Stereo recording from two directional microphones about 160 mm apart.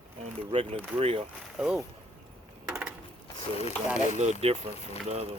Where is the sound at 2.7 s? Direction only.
5° right (ahead or behind).